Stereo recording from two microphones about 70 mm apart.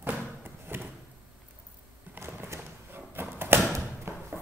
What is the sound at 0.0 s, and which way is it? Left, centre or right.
Thump, right.